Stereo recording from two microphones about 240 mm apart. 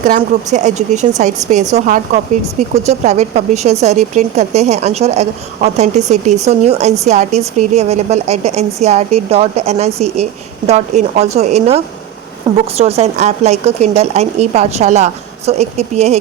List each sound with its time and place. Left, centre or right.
0.0 s speech: right
3.0 s speech: right